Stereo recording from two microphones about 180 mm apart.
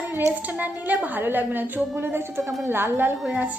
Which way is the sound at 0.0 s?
10° right (ahead or behind).